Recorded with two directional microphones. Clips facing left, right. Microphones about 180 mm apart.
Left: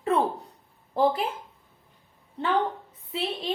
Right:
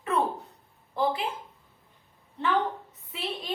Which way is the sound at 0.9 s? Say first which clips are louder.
Left 4 dB; 40° left (ahead or behind).